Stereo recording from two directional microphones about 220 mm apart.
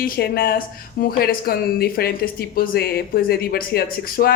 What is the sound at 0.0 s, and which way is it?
Speech, 40° left (ahead or behind).